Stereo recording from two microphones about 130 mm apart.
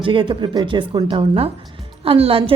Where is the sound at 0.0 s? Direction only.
40° right (ahead or behind).